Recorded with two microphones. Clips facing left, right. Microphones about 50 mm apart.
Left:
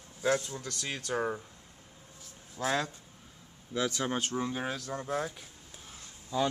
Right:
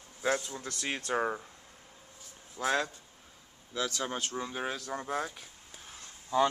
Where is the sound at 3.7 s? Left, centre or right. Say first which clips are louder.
Left 3 dB; centre.